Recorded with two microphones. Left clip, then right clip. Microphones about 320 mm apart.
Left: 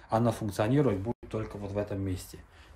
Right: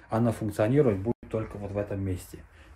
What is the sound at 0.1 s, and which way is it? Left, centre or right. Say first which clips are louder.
Speech: even; centre.